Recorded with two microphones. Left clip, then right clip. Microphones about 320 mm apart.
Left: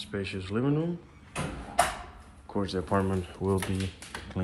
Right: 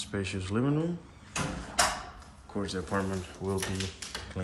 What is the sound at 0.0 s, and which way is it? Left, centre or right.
Speech, centre.